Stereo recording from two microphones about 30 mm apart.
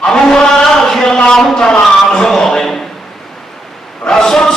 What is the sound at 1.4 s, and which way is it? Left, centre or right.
A man's voice, left.